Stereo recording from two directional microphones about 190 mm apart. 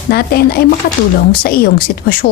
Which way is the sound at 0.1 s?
55° left (ahead or behind).